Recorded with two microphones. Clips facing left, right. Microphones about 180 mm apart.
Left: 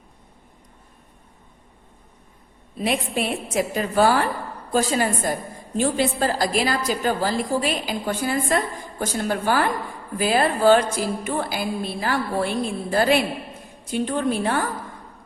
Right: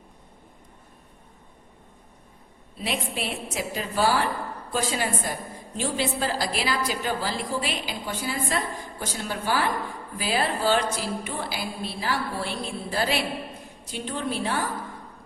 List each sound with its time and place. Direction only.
2.7 s a woman's voice: 50° left (ahead or behind)